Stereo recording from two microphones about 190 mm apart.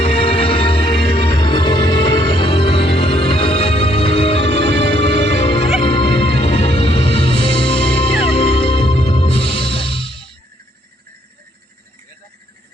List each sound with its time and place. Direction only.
0.0 s music: 30° left (ahead or behind)